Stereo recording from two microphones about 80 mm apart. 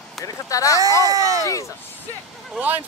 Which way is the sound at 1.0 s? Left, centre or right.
Right.